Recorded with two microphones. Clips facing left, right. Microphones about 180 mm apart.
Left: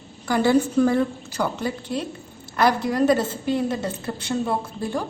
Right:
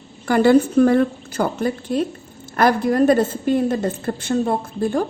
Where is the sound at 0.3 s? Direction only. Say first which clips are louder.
Right 5 dB; 60° right (ahead or behind).